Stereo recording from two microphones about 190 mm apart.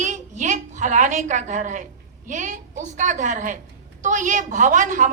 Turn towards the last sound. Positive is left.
turn(degrees=-40)  # may be behind; listen again after turning